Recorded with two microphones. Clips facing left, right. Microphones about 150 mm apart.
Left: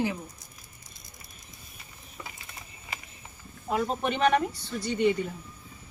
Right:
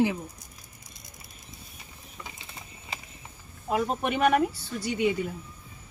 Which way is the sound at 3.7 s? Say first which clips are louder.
Right 1 dB; 5° right (ahead or behind).